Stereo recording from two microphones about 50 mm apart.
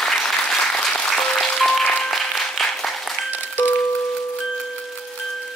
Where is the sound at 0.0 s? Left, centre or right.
Centre.